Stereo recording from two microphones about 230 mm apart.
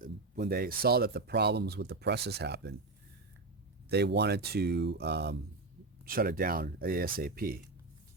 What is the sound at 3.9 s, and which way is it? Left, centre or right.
Speech, right.